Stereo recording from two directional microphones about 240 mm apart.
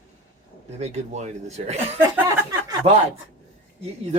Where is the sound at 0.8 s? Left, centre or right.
Right.